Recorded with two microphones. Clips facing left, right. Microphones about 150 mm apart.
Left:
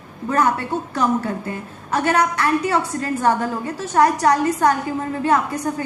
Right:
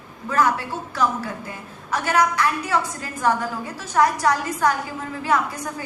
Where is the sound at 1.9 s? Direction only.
25° left (ahead or behind).